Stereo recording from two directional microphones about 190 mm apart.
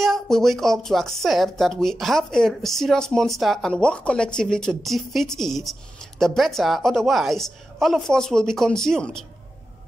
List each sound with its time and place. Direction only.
0.0 s speech: centre (ahead or behind)